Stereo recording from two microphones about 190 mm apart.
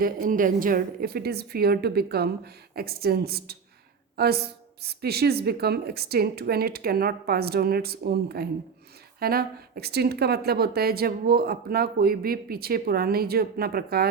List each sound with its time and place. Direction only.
0.0 s speech: 45° right (ahead or behind)